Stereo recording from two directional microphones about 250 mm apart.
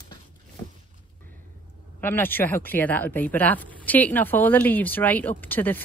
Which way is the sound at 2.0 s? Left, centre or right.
Centre.